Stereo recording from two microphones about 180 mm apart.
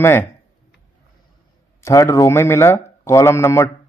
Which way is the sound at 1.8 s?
15° left (ahead or behind).